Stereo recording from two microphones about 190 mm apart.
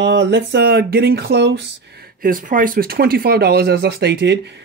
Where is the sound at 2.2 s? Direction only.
45° right (ahead or behind).